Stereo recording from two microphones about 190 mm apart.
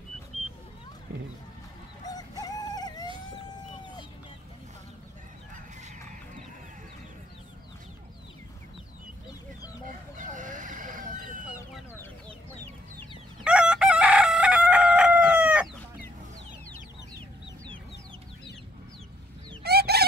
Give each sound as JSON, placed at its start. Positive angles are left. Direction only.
{"t": 2.0, "sound": "chicken", "side_deg": 20}
{"t": 9.8, "sound": "chicken", "side_deg": -40}
{"t": 13.4, "sound": "chicken", "side_deg": -5}
{"t": 19.6, "sound": "chicken", "side_deg": -55}